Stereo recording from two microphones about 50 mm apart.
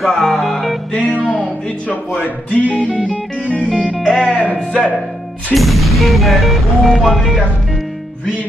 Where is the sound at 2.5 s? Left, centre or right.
Left.